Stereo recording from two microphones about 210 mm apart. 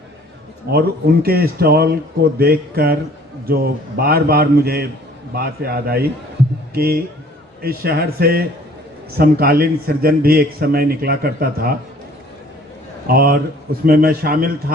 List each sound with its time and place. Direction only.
0.7 s a man's voice: 45° right (ahead or behind)
13.1 s a man's voice: 45° right (ahead or behind)